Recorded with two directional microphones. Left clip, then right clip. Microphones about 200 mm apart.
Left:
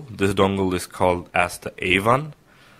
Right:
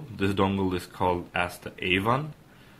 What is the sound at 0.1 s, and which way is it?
Speech, 45° left (ahead or behind).